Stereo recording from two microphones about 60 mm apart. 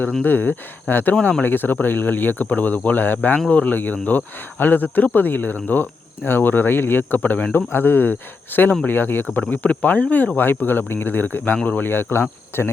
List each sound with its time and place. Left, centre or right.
0.2 s speech: left